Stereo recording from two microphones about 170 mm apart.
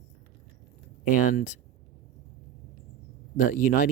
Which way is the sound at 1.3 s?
50° left (ahead or behind).